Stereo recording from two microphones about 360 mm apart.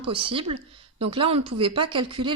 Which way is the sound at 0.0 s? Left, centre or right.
Centre.